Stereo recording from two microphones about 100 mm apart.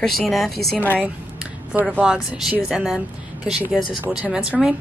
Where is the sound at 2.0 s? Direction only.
10° right (ahead or behind).